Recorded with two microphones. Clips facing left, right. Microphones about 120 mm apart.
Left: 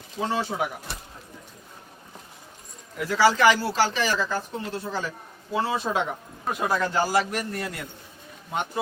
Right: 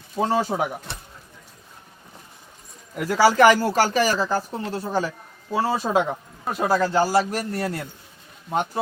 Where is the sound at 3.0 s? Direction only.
45° right (ahead or behind).